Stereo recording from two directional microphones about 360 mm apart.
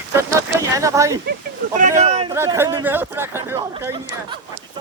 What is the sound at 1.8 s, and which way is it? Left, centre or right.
Speech, centre.